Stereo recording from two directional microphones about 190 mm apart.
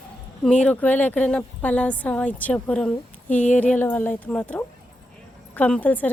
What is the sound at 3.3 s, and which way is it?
Speech, 40° left (ahead or behind).